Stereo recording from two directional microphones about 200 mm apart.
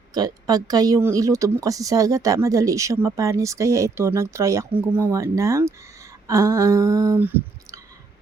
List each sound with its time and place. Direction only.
0.1 s speech: 20° right (ahead or behind)